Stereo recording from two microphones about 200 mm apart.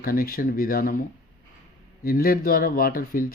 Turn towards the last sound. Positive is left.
turn(degrees=45)  # may be behind; listen again after turning